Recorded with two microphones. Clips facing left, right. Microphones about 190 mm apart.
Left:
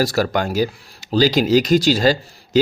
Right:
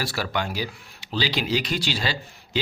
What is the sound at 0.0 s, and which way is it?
Speech, 40° left (ahead or behind).